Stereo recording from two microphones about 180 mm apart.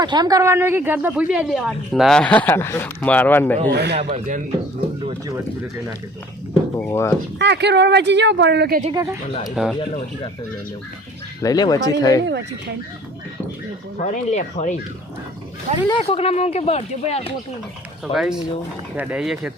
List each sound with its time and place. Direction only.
0.0 s speech: 25° right (ahead or behind); by 3.6 s 10° left (ahead or behind)
3.7 s speech: 65° right (ahead or behind)
4.1 s speech: 45° right (ahead or behind)
6.5 s speech: 10° left (ahead or behind)
7.3 s speech: 70° right (ahead or behind)
8.9 s speech: 15° right (ahead or behind)
9.6 s speech: 5° right (ahead or behind)
11.4 s speech: 20° left (ahead or behind)
14.0 s speech: 40° left (ahead or behind)
15.9 s speech: 30° left (ahead or behind)
18.1 s speech: centre (ahead or behind)